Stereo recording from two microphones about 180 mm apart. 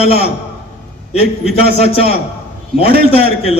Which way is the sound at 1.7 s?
35° left (ahead or behind).